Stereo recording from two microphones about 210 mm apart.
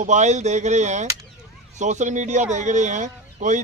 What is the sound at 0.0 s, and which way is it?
Speech, 35° right (ahead or behind).